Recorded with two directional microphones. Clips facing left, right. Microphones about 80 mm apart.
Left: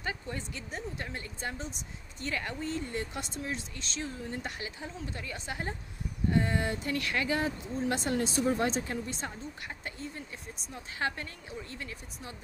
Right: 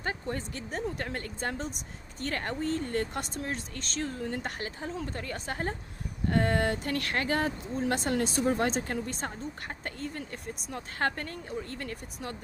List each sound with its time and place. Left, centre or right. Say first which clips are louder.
0.0 s speech: right 3 dB; right